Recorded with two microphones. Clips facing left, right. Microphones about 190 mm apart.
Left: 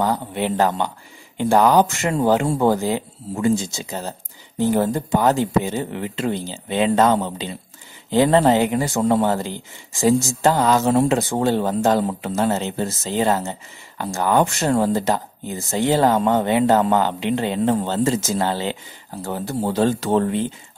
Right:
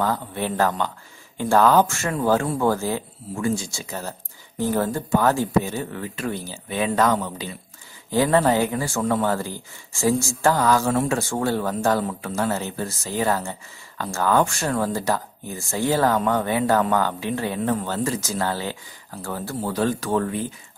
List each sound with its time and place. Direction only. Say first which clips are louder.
0.0 s speech: left 3 dB; 20° left (ahead or behind)